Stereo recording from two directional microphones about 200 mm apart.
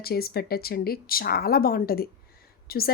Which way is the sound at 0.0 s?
50° left (ahead or behind).